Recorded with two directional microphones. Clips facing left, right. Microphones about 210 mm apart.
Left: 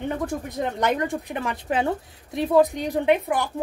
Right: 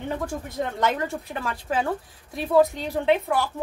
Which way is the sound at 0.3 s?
15° left (ahead or behind).